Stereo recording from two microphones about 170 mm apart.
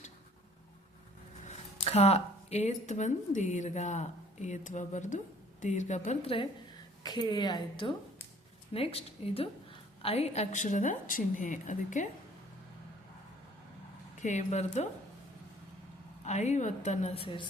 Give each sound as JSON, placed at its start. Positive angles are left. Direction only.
{"t": 1.5, "sound": "a woman's voice", "side_deg": 40}
{"t": 14.2, "sound": "a woman's voice", "side_deg": 45}
{"t": 16.2, "sound": "a woman's voice", "side_deg": 40}